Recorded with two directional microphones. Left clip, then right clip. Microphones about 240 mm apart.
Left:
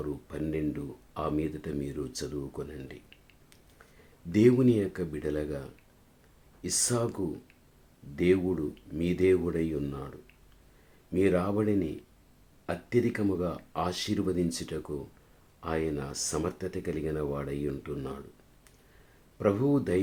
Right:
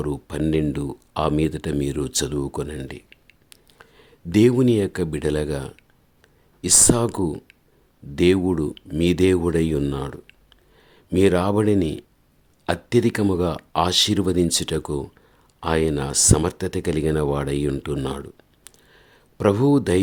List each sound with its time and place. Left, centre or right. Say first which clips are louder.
0.0 s speech: right 10 dB; right
19.4 s speech: right 9 dB; right